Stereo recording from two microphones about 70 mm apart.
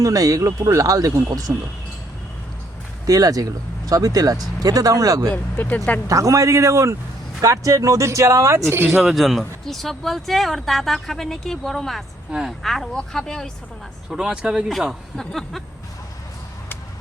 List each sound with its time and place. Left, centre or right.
0.0 s speech: right
3.1 s speech: right
5.3 s speech: left
6.1 s speech: right
9.0 s speech: centre
14.1 s speech: centre
14.7 s speech: centre